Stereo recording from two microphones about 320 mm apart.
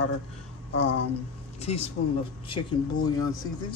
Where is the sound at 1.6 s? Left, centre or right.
Centre.